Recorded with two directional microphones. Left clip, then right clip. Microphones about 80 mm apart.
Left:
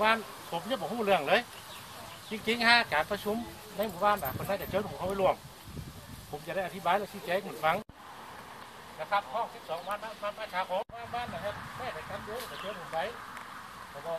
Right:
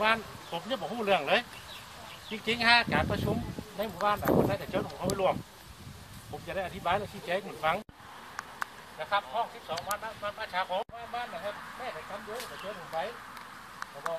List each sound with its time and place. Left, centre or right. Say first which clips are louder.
0.0 s speech: even; centre
6.4 s speech: left 1 dB; centre
9.0 s speech: right 1 dB; right
11.1 s speech: even; centre